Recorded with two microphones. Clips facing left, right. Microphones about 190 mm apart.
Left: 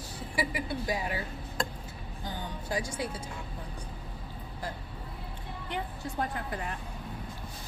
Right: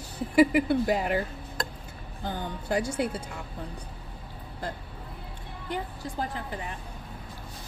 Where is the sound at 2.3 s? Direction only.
60° right (ahead or behind).